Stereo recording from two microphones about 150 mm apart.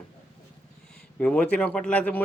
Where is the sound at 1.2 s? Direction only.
10° left (ahead or behind).